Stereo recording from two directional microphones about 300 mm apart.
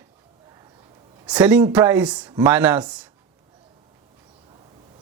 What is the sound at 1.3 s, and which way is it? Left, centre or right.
Speech, centre.